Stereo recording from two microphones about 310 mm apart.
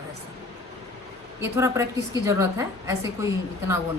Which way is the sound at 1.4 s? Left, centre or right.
Centre.